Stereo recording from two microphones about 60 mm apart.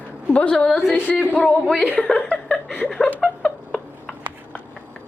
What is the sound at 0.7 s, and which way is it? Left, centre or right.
Speech, centre.